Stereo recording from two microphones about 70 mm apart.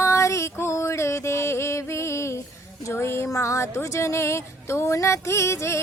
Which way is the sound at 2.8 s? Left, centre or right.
Left.